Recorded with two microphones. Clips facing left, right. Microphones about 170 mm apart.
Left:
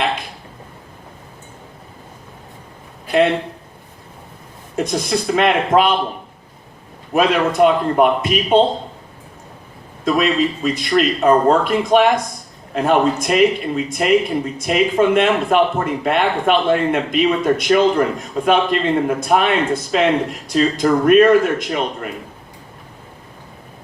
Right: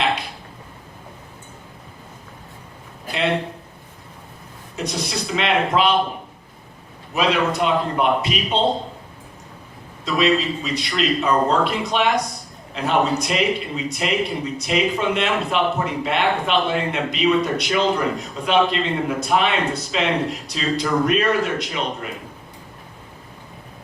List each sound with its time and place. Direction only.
4.8 s a man's voice: 50° left (ahead or behind)
7.1 s a man's voice: 50° left (ahead or behind)
10.0 s a man's voice: 50° left (ahead or behind)